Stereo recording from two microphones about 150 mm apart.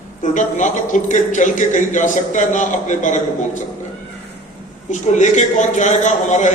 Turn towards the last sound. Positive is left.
turn(degrees=50)  # may be behind; listen again after turning